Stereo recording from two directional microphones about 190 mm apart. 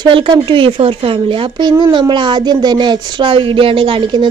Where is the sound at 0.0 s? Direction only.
25° right (ahead or behind).